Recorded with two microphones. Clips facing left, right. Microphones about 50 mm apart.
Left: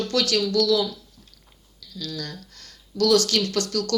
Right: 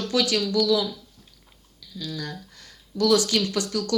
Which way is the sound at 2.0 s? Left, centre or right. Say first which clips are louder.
Even; centre.